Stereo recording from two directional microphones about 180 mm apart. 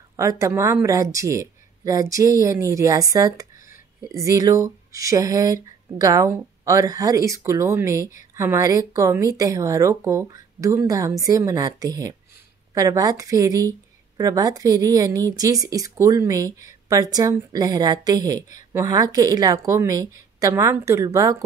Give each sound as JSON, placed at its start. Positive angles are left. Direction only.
{"t": 0.1, "sound": "speech", "side_deg": -15}